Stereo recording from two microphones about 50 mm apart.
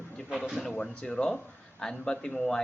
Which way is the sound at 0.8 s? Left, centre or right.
Left.